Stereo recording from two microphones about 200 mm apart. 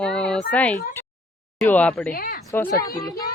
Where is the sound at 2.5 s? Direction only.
15° left (ahead or behind).